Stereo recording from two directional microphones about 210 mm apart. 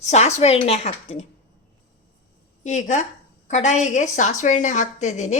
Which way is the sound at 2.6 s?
35° left (ahead or behind).